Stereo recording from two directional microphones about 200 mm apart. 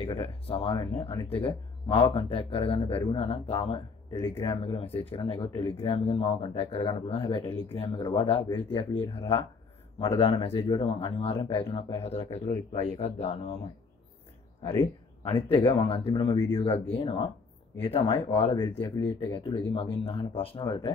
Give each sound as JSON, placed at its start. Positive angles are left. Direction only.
{"t": 0.0, "sound": "speech", "side_deg": 30}
{"t": 14.7, "sound": "speech", "side_deg": 20}
{"t": 18.8, "sound": "speech", "side_deg": 15}